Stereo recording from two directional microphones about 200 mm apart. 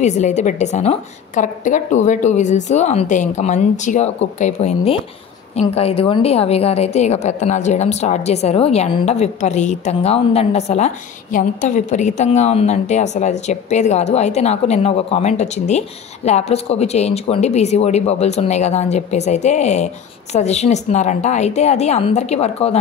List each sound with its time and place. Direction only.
0.0 s a woman's voice: 35° left (ahead or behind)